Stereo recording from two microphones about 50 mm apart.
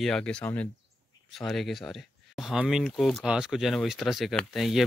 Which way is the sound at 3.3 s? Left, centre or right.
Centre.